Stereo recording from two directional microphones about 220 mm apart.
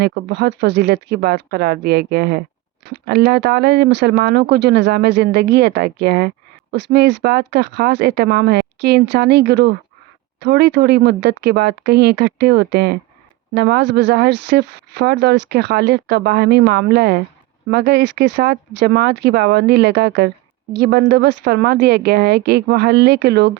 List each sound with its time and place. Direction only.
0.0 s speech: 45° right (ahead or behind)